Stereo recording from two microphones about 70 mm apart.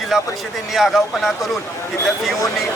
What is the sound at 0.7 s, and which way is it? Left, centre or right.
Speech, centre.